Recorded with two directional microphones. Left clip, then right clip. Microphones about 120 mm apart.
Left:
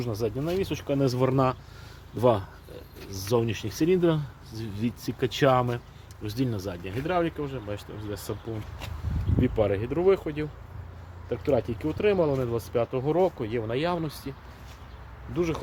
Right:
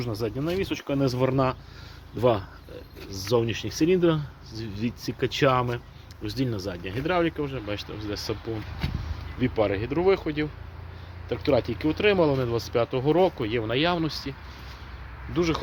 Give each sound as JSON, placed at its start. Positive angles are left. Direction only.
{"t": 0.0, "sound": "speech", "side_deg": 45}
{"t": 1.0, "sound": "speech", "side_deg": 90}
{"t": 2.1, "sound": "speech", "side_deg": 60}
{"t": 4.5, "sound": "speech", "side_deg": 55}
{"t": 6.8, "sound": "speech", "side_deg": 20}
{"t": 7.1, "sound": "speech", "side_deg": 10}
{"t": 9.4, "sound": "speech", "side_deg": 40}
{"t": 15.4, "sound": "speech", "side_deg": 25}